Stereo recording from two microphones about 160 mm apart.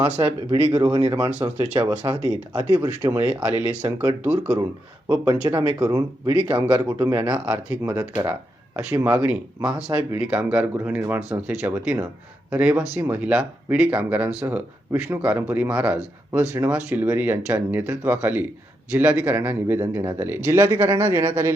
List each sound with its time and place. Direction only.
0.0 s speech: 30° right (ahead or behind)
1.3 s speech: 10° right (ahead or behind)
5.2 s speech: 20° right (ahead or behind)
7.2 s speech: 10° right (ahead or behind)